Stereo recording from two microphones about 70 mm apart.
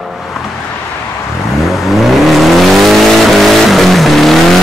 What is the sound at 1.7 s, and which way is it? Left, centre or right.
Vehicle, centre.